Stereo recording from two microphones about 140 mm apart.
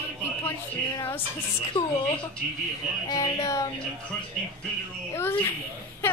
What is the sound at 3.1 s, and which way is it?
Speech, 25° left (ahead or behind).